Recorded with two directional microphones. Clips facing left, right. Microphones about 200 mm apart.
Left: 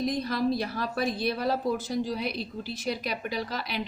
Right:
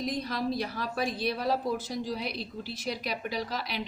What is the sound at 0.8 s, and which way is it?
Speech, 55° left (ahead or behind).